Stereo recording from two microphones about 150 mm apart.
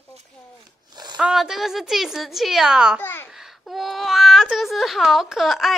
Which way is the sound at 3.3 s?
Centre (ahead or behind).